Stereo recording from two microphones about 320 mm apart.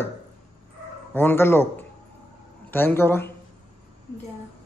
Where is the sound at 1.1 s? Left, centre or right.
Centre.